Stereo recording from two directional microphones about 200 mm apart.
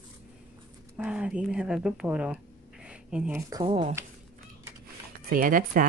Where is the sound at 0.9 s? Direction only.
5° right (ahead or behind).